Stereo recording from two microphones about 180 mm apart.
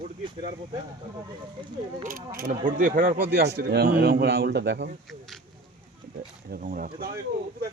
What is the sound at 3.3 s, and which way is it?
A man's voice, 65° right (ahead or behind).